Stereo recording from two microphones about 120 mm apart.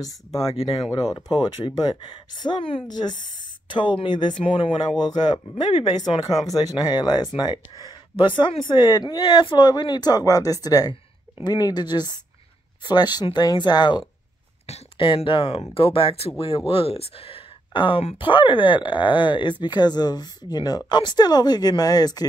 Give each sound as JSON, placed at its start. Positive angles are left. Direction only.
{"t": 0.0, "sound": "speech", "side_deg": 30}